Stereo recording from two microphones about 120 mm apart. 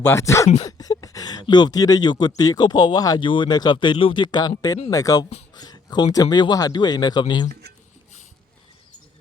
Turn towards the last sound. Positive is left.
turn(degrees=40)  # may be behind; listen again after turning